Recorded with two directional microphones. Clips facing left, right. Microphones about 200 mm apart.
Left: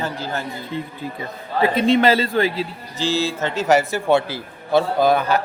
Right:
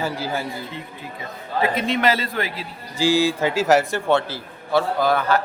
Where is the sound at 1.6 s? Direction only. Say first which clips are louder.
Left 5 dB; 30° left (ahead or behind).